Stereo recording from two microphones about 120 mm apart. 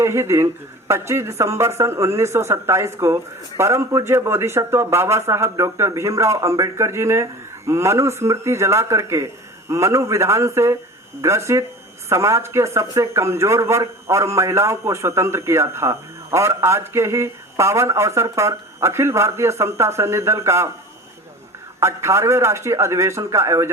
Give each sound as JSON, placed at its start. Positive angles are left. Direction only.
{"t": 0.0, "sound": "speech", "side_deg": -20}
{"t": 21.8, "sound": "speech", "side_deg": -25}